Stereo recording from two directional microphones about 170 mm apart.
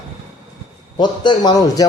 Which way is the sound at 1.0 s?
25° left (ahead or behind).